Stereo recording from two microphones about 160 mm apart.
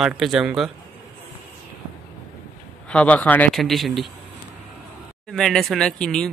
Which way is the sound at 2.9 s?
10° left (ahead or behind).